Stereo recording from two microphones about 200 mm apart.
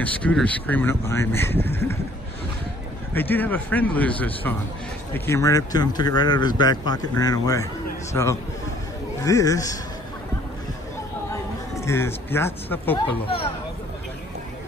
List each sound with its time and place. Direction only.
0.0 s speech: 5° left (ahead or behind)
3.2 s speech: 10° left (ahead or behind)
11.7 s speech: 15° left (ahead or behind)